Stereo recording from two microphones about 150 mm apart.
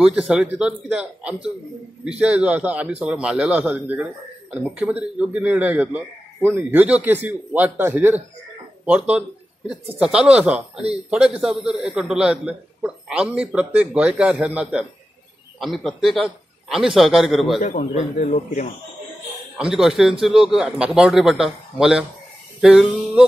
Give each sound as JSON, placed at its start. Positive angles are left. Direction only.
{"t": 0.0, "sound": "a man's voice", "side_deg": -5}
{"t": 17.6, "sound": "speech", "side_deg": 55}
{"t": 19.6, "sound": "a man's voice", "side_deg": -5}
{"t": 22.6, "sound": "music", "side_deg": -5}